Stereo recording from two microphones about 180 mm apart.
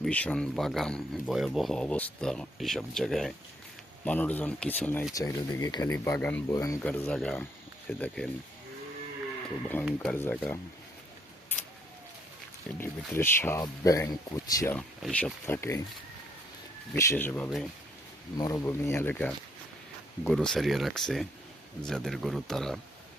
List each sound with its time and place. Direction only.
0.0 s speech: 5° left (ahead or behind)
6.8 s speech: 5° left (ahead or behind)
9.8 s speech: 5° left (ahead or behind)
12.8 s speech: 10° left (ahead or behind)
14.8 s speech: 5° left (ahead or behind)
16.9 s speech: 15° left (ahead or behind)